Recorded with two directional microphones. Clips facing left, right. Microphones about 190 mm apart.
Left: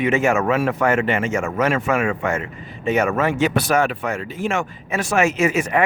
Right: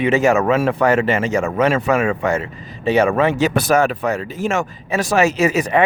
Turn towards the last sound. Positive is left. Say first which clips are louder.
# right 2 dB
turn(degrees=-35)  # may be behind; listen again after turning